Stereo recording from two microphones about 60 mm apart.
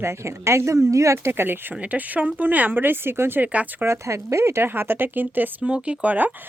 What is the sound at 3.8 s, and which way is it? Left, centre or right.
Speech, right.